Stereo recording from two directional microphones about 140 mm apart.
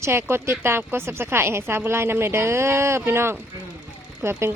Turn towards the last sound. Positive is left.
turn(degrees=-15)  # may be behind; listen again after turning